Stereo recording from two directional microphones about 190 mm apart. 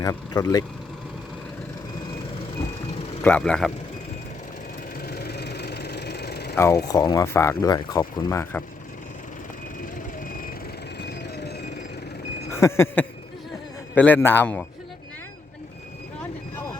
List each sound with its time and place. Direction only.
0.0 s speech: 20° left (ahead or behind)
3.2 s speech: 5° left (ahead or behind)
4.9 s vehicle: 55° left (ahead or behind)
6.8 s speech: 20° left (ahead or behind)
11.0 s a sound: 60° left (ahead or behind)
12.5 s a sound: 15° left (ahead or behind)
13.9 s a man's voice: 10° left (ahead or behind)